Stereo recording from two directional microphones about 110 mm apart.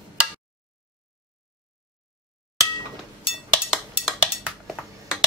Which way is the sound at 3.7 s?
5° right (ahead or behind).